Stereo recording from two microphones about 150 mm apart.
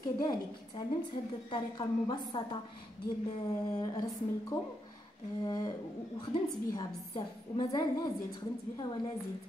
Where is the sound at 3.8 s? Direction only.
25° left (ahead or behind).